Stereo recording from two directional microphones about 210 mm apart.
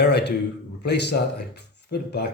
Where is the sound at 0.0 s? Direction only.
55° left (ahead or behind).